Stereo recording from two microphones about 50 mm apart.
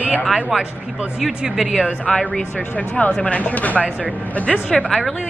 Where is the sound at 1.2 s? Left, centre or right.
Centre.